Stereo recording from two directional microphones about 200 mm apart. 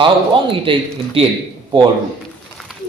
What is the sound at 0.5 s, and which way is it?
Speech, 25° right (ahead or behind).